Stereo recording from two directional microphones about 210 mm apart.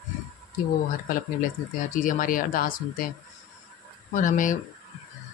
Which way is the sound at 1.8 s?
40° left (ahead or behind).